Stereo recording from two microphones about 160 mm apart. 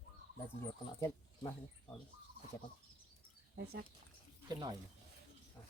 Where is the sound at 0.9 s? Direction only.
15° left (ahead or behind).